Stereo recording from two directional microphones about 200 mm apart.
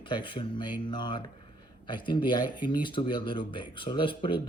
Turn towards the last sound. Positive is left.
turn(degrees=25)  # may be behind; listen again after turning